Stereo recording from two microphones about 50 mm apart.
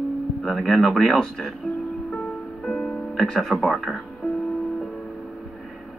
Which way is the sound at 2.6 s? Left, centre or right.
Centre.